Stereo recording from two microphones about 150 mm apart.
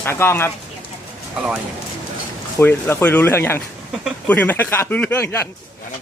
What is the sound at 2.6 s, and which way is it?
Speech, 15° left (ahead or behind).